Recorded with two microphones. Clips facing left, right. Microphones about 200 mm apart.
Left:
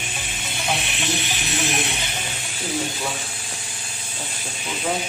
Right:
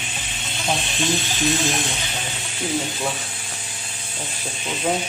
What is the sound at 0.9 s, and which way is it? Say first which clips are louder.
Snake: right 4 dB; 15° left (ahead or behind).